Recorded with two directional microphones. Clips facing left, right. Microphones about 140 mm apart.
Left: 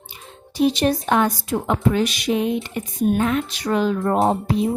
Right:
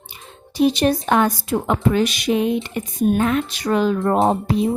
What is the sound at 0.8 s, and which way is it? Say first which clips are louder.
Speech: right 2 dB; 60° right (ahead or behind).